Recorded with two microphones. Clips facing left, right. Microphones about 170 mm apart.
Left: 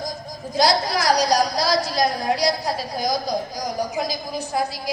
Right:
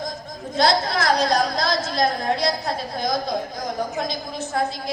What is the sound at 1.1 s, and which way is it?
Speech, 25° right (ahead or behind).